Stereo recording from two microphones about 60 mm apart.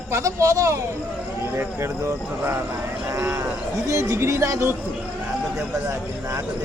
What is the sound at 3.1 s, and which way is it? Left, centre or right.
Cattle, right.